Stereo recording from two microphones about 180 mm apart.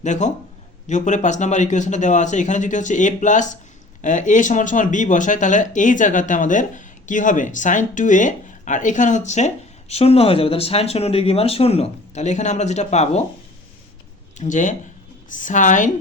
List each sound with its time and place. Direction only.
0.0 s a man's voice: 40° left (ahead or behind)
14.3 s speech: 45° left (ahead or behind)